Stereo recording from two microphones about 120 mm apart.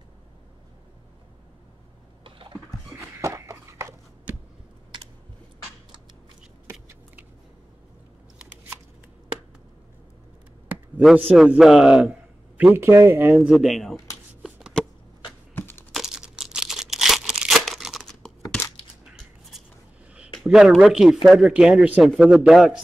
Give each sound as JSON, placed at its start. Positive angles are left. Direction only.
{"t": 2.2, "sound": "a sound", "side_deg": -45}
{"t": 2.9, "sound": "a sound", "side_deg": -25}
{"t": 6.7, "sound": "shuffling cards", "side_deg": -20}
{"t": 11.3, "sound": "a man's voice", "side_deg": -5}
{"t": 13.5, "sound": "a man's voice", "side_deg": 0}
{"t": 15.6, "sound": "computer keyboard", "side_deg": 15}
{"t": 15.9, "sound": "crumpling", "side_deg": -5}
{"t": 20.4, "sound": "a man's voice", "side_deg": -5}